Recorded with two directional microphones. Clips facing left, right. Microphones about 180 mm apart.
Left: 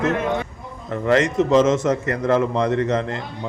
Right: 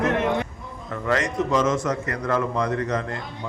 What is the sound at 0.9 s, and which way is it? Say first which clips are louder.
A man's voice: left 6 dB; 25° left (ahead or behind).